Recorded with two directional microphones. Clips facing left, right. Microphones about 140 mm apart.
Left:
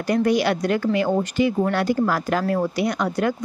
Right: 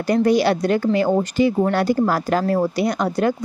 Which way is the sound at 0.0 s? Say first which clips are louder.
Right 3 dB; 35° right (ahead or behind).